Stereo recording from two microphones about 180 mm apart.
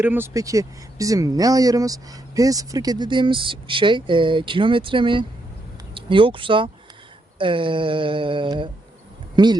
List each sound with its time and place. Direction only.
0.0 s speech: 10° right (ahead or behind)